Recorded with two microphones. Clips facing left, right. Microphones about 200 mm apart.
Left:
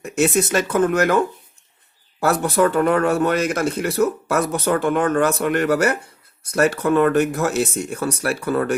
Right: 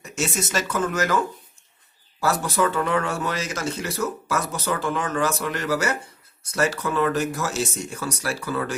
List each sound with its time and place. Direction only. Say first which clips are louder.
0.0 s speech: left 9 dB; 60° left (ahead or behind)
2.2 s speech: left 5 dB; 60° left (ahead or behind)